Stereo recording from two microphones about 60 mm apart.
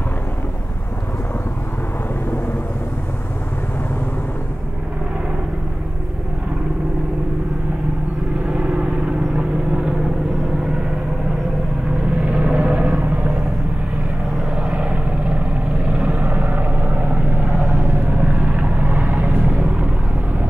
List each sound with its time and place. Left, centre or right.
8.5 s vehicle: centre
12.2 s vehicle: right
14.6 s vehicle: centre